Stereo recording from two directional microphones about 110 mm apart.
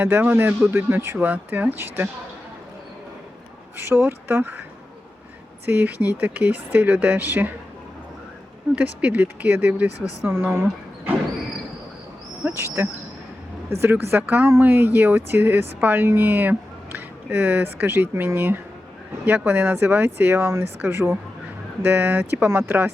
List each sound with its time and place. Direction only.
0.0 s speech: 20° right (ahead or behind)
3.8 s speech: 20° right (ahead or behind)
5.6 s speech: 15° right (ahead or behind)
8.7 s speech: 10° right (ahead or behind)
10.5 s a sound: 25° right (ahead or behind)
12.4 s speech: 15° right (ahead or behind)
12.6 s speech: 25° right (ahead or behind)